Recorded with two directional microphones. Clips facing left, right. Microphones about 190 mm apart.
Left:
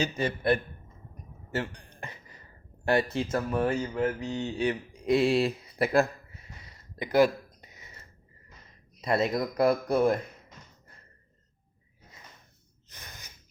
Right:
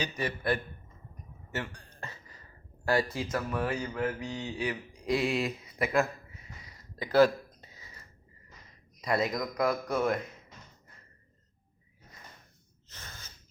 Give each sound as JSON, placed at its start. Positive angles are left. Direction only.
{"t": 0.0, "sound": "a man's voice", "side_deg": 25}
{"t": 1.7, "sound": "a sound", "side_deg": 15}
{"t": 2.8, "sound": "speech", "side_deg": 25}
{"t": 7.0, "sound": "a sound", "side_deg": 15}
{"t": 9.0, "sound": "speech", "side_deg": 25}
{"t": 12.9, "sound": "gasp", "side_deg": 15}